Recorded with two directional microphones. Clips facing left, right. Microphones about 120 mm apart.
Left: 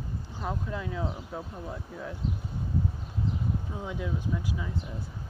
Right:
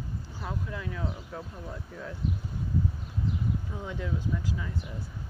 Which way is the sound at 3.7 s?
15° left (ahead or behind).